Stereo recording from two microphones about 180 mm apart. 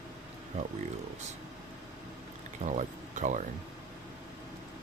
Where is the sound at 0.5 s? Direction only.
40° right (ahead or behind).